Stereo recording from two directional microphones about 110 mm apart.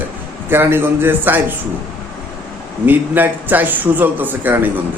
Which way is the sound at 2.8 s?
15° right (ahead or behind).